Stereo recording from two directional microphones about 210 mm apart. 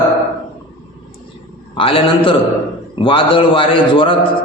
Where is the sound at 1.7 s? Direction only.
25° left (ahead or behind).